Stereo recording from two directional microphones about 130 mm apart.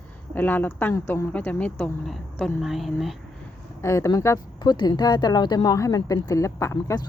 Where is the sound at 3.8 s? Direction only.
20° left (ahead or behind).